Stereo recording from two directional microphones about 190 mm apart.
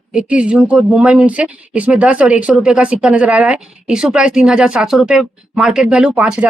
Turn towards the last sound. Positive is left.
turn(degrees=-5)  # may be behind; listen again after turning